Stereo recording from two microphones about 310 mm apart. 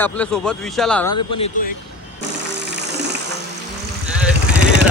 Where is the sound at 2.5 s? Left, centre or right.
Right.